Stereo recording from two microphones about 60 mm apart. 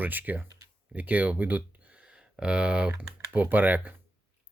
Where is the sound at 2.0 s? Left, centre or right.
Centre.